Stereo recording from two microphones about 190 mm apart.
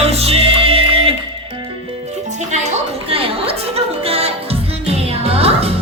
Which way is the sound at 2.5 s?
35° right (ahead or behind).